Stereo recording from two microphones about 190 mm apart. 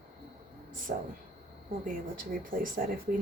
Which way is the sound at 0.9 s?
50° right (ahead or behind).